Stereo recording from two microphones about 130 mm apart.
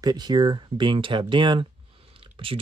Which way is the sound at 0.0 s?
35° right (ahead or behind).